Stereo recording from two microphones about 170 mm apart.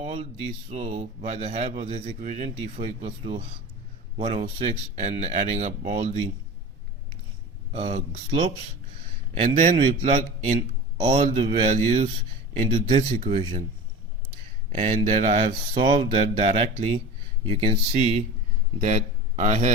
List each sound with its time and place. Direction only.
0.0 s speech: 35° right (ahead or behind)
7.7 s speech: 35° right (ahead or behind)
10.9 s speech: 30° right (ahead or behind)
11.2 s speech: 45° right (ahead or behind)
14.8 s a man's voice: 40° right (ahead or behind)